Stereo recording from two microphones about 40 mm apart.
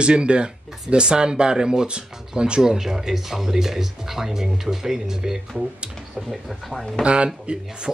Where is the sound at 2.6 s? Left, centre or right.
Centre.